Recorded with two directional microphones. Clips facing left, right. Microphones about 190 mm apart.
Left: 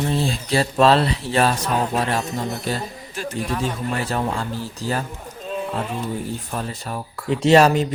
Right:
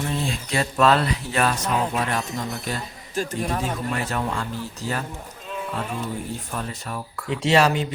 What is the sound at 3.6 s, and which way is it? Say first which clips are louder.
Speech: left 2 dB; 35° left (ahead or behind).